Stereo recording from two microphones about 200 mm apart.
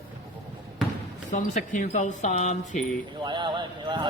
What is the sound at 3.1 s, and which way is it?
Speech, 25° right (ahead or behind).